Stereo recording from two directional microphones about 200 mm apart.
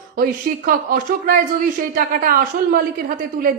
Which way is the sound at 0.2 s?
45° right (ahead or behind).